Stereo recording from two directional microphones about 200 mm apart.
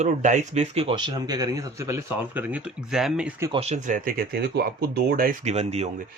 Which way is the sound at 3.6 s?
35° right (ahead or behind).